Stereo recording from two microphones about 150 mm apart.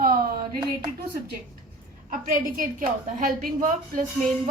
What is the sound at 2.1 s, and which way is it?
A woman's voice, 60° right (ahead or behind).